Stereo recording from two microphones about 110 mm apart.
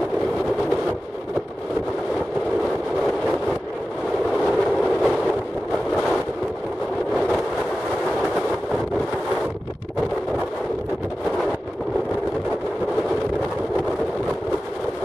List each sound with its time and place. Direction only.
4.4 s train: centre (ahead or behind)
7.2 s vehicle: 5° right (ahead or behind)